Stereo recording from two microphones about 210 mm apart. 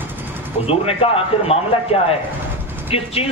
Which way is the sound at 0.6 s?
30° left (ahead or behind).